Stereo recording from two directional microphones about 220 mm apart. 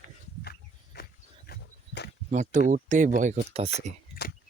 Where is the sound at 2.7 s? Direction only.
35° right (ahead or behind).